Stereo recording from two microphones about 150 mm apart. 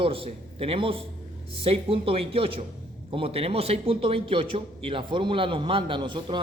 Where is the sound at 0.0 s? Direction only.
35° right (ahead or behind).